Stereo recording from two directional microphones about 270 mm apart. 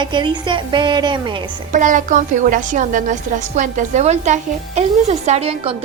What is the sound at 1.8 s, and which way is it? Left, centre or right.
A woman's voice, right.